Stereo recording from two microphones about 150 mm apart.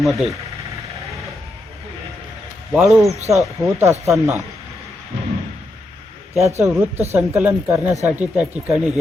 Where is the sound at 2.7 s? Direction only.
Centre (ahead or behind).